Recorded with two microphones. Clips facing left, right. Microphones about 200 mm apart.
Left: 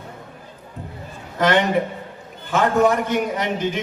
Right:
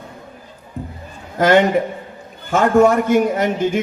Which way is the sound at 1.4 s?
45° right (ahead or behind).